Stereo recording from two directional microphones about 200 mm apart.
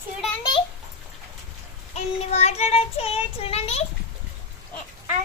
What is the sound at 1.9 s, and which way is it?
Child singing, 35° left (ahead or behind).